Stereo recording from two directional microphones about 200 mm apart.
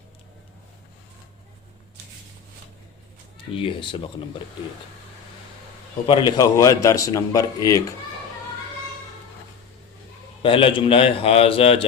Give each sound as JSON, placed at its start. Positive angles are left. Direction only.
{"t": 3.5, "sound": "a man's voice", "side_deg": 25}
{"t": 6.1, "sound": "a man's voice", "side_deg": 20}
{"t": 10.4, "sound": "a man's voice", "side_deg": 25}